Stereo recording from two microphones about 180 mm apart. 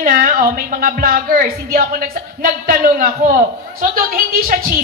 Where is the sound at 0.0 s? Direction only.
50° right (ahead or behind).